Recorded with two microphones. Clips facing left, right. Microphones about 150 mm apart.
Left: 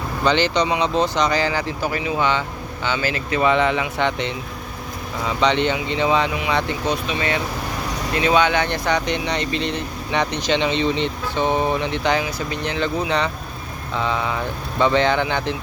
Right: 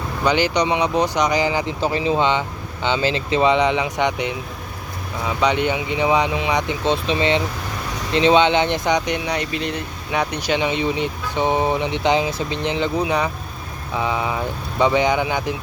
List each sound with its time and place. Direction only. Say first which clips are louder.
0.3 s speech: even; 10° right (ahead or behind)
6.8 s speech: right 3 dB; 25° right (ahead or behind); by 15.5 s 10° right (ahead or behind)